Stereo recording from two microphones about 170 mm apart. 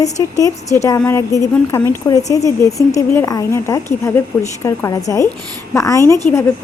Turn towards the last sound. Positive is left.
turn(degrees=15)  # may be behind; listen again after turning